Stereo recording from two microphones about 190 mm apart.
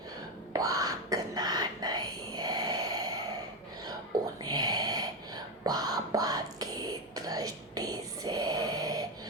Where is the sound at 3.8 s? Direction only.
20° right (ahead or behind).